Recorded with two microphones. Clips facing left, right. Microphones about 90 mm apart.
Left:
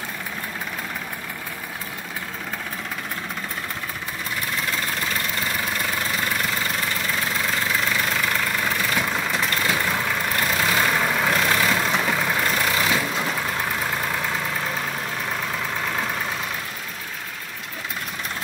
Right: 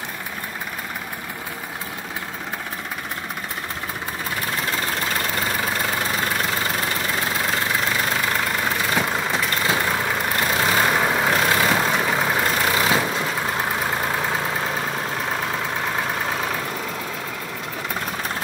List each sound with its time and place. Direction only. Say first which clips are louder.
8.0 s vehicle: right 1 dB; 20° right (ahead or behind)